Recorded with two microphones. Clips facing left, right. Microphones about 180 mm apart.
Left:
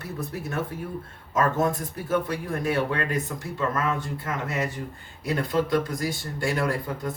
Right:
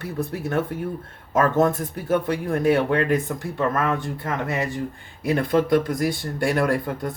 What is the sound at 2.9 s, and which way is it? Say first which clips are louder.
Speech: right 7 dB; 60° right (ahead or behind).